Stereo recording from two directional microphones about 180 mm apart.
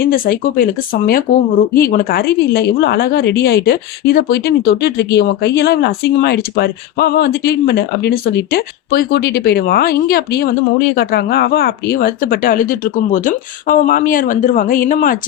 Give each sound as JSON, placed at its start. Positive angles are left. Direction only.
{"t": 0.0, "sound": "a woman's voice", "side_deg": 55}